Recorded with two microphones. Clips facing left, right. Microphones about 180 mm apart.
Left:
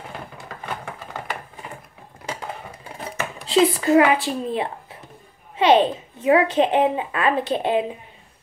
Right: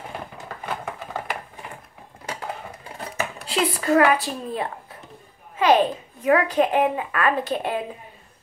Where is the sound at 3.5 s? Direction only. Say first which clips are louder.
Left 4 dB; 20° left (ahead or behind).